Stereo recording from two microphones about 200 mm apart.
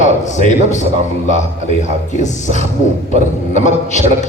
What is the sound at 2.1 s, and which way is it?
A man's voice, 40° left (ahead or behind).